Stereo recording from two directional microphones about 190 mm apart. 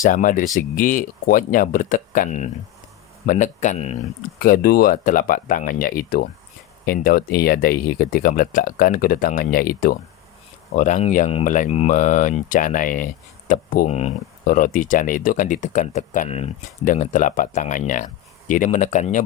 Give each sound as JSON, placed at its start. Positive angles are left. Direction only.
{"t": 0.0, "sound": "speech", "side_deg": 45}
{"t": 4.4, "sound": "speech", "side_deg": 50}